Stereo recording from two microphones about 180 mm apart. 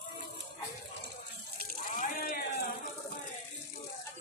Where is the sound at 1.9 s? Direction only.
50° left (ahead or behind).